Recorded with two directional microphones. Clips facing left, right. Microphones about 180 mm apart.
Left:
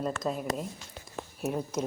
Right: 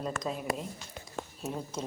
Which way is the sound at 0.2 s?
Centre (ahead or behind).